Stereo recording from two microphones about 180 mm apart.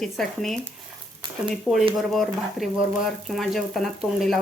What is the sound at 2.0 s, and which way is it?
Speech, centre (ahead or behind).